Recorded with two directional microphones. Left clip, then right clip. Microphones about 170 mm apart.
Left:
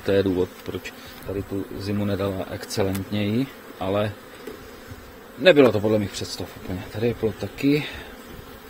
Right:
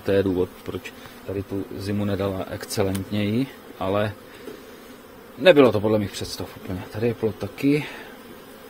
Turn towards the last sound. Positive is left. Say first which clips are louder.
# even
turn(degrees=-10)  # may be behind; listen again after turning